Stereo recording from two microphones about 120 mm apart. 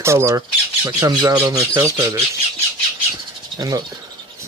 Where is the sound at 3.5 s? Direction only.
30° right (ahead or behind).